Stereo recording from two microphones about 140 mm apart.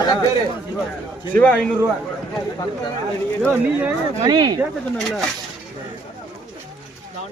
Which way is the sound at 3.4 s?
15° right (ahead or behind).